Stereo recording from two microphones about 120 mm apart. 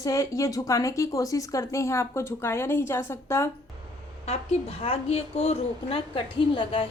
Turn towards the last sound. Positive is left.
turn(degrees=45)  # may be behind; listen again after turning